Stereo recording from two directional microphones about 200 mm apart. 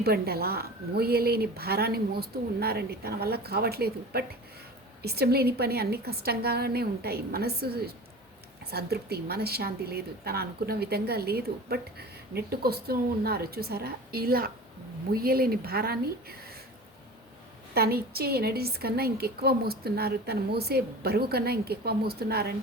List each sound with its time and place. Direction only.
0.0 s a woman's voice: 50° right (ahead or behind)
17.7 s a woman's voice: 50° right (ahead or behind)